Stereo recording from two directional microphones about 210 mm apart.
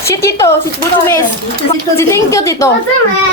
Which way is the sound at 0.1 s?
15° left (ahead or behind).